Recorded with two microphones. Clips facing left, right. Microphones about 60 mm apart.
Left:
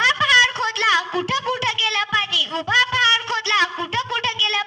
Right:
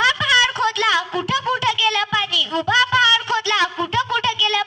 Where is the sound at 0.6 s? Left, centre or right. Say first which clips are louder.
Right 1 dB; left.